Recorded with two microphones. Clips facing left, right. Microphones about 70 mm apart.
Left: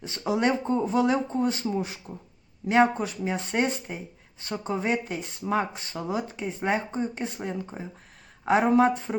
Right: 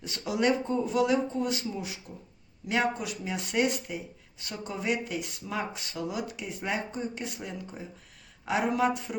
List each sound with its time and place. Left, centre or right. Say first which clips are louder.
0.0 s speech: left 2 dB; left